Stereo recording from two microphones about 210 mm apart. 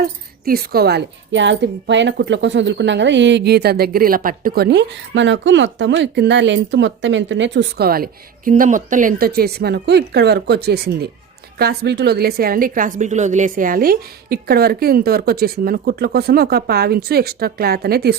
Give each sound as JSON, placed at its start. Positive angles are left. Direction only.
{"t": 0.0, "sound": "a woman's voice", "side_deg": -45}